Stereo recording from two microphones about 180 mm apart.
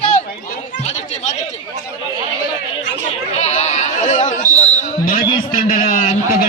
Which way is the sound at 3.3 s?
35° left (ahead or behind).